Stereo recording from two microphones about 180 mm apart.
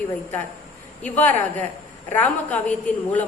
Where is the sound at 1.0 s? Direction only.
10° left (ahead or behind).